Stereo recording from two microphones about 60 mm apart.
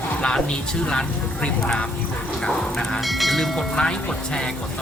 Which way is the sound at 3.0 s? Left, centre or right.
Centre.